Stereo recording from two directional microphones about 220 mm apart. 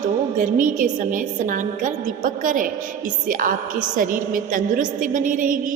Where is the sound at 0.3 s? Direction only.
40° right (ahead or behind).